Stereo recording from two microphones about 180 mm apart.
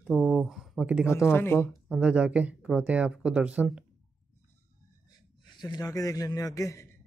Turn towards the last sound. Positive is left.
turn(degrees=15)  # may be behind; listen again after turning